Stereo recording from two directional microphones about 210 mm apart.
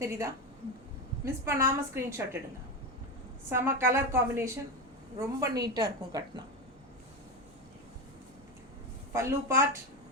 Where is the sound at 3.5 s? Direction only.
15° right (ahead or behind).